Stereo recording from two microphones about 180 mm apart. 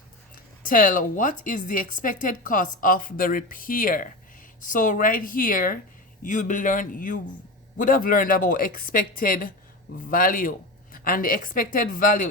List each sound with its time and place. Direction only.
0.6 s a woman's voice: 50° left (ahead or behind)